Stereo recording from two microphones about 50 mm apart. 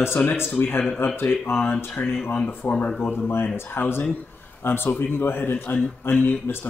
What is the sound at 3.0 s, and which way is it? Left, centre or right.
Speech, left.